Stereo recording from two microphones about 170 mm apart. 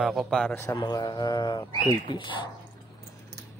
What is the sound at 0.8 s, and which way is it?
Speech, 25° left (ahead or behind).